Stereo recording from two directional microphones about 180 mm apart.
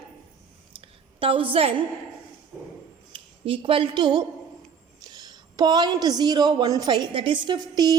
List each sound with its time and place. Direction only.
0.7 s a sound: 30° right (ahead or behind)
1.2 s a woman's voice: 30° right (ahead or behind)
3.1 s speech: 30° right (ahead or behind)